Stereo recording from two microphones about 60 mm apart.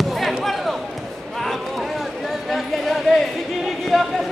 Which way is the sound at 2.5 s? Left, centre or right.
Centre.